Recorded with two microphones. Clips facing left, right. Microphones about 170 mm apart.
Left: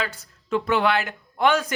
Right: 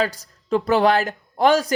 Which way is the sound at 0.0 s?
40° right (ahead or behind).